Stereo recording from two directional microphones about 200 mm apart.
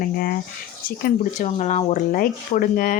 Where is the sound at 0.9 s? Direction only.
45° left (ahead or behind).